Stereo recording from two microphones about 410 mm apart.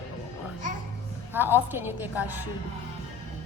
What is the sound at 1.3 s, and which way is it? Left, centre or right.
Speech, centre.